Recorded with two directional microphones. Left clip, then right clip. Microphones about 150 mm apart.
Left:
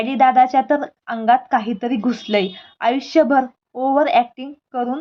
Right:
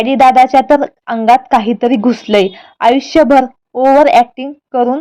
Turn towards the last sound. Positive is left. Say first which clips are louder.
# right 10 dB
turn(degrees=-35)  # may be behind; listen again after turning